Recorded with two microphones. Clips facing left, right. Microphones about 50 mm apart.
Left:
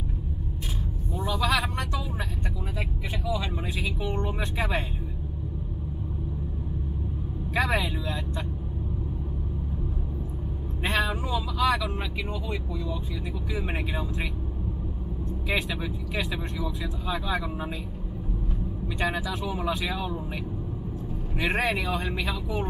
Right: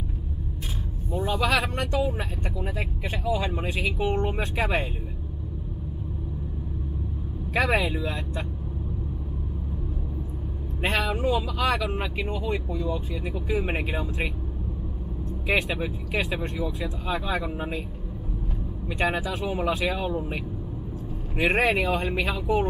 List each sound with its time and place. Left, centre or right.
1.2 s speech: right
3.3 s speech: right
3.6 s speech: right
4.2 s speech: right
7.7 s speech: right
10.8 s speech: right
15.4 s speech: right
18.9 s speech: right
21.4 s speech: right